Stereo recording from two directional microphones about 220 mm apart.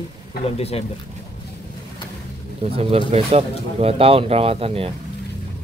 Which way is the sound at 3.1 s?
30° right (ahead or behind).